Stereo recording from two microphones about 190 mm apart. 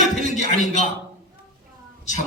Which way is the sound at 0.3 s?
40° left (ahead or behind).